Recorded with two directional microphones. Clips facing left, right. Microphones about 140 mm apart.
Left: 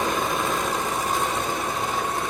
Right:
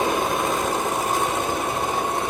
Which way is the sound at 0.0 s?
15° right (ahead or behind).